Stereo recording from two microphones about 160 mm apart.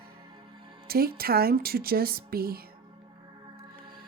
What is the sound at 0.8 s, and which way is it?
A woman's voice, 70° right (ahead or behind).